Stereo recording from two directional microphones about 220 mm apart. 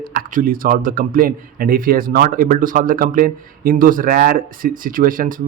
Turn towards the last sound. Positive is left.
turn(degrees=-40)  # may be behind; listen again after turning